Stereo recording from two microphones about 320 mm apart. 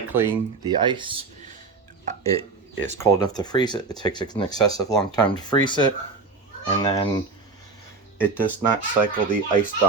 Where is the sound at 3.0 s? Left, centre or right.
Centre.